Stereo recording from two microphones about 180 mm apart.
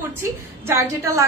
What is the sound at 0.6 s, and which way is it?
Speech, 15° right (ahead or behind).